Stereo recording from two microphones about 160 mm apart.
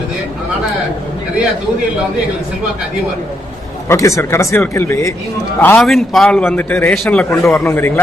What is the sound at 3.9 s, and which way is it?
A man's voice, 20° left (ahead or behind).